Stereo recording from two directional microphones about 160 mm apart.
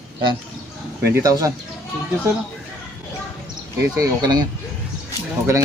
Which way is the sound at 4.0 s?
25° right (ahead or behind).